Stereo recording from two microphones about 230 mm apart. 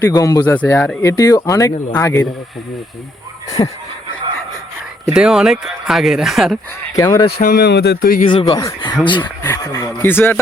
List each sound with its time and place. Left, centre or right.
0.0 s speech: centre
3.6 s speech: centre
5.0 s speech: centre
6.9 s speech: centre
7.3 s speech: left
8.3 s speech: left